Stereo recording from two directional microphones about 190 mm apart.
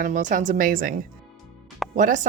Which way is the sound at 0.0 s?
40° right (ahead or behind).